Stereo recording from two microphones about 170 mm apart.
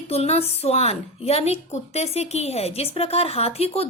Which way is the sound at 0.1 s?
35° left (ahead or behind).